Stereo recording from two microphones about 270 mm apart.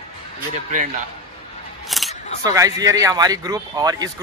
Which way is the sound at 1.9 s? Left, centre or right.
Centre.